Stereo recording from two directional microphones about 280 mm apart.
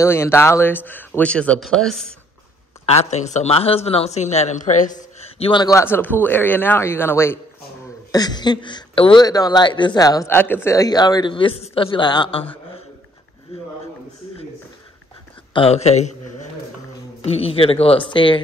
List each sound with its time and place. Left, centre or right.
0.0 s speech: centre
2.9 s a man's voice: left
13.5 s speech: left
15.5 s a man's voice: left